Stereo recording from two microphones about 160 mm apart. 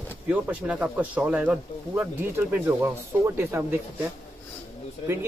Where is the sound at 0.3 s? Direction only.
10° right (ahead or behind).